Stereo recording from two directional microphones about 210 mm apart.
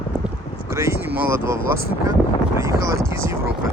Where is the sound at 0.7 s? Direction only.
10° right (ahead or behind).